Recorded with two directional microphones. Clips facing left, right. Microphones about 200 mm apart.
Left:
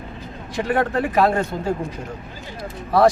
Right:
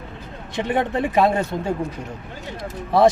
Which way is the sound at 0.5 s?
20° right (ahead or behind).